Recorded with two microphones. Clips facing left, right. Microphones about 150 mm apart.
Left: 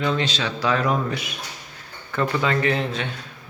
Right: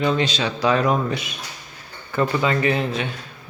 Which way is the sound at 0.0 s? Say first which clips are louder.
Right 3 dB; 15° right (ahead or behind).